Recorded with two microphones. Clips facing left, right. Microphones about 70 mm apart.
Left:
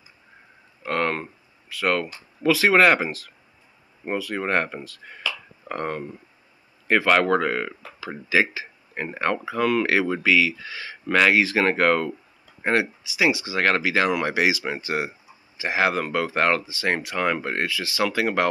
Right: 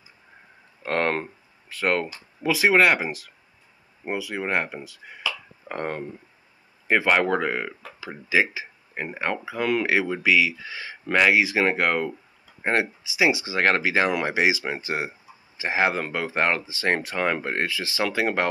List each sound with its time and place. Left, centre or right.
0.8 s speech: right
2.4 s speech: centre
5.7 s speech: right
6.9 s speech: centre
10.7 s speech: right
11.1 s speech: centre
12.6 s speech: right